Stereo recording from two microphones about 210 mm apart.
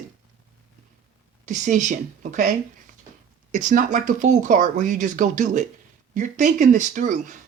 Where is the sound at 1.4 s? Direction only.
35° right (ahead or behind).